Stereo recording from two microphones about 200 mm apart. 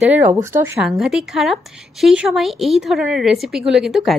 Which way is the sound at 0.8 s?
Centre (ahead or behind).